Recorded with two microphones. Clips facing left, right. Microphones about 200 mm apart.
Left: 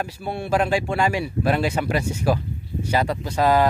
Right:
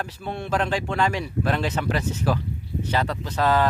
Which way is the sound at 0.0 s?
10° left (ahead or behind).